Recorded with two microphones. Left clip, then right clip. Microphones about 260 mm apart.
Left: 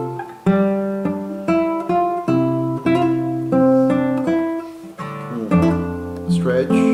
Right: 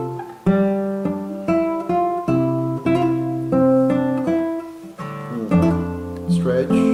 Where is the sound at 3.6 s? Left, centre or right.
Centre.